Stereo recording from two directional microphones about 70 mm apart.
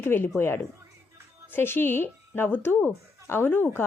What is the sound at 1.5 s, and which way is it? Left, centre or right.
A woman's voice, left.